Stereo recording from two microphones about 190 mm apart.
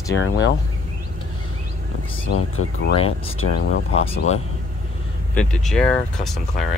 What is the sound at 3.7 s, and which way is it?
Speech, 90° left.